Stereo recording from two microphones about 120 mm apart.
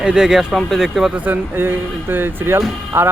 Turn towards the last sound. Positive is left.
turn(degrees=-20)  # may be behind; listen again after turning